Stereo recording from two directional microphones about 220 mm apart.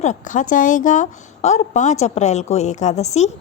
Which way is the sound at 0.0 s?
35° left (ahead or behind).